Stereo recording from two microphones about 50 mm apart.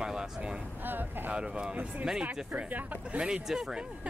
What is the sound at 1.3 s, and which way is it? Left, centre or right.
Speech, centre.